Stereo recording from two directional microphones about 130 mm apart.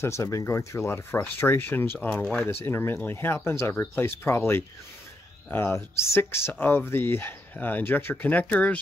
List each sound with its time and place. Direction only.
0.0 s speech: 25° left (ahead or behind)